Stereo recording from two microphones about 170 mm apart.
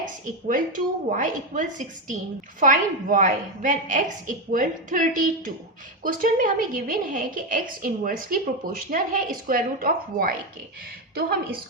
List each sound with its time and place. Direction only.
0.0 s a woman's voice: 50° right (ahead or behind)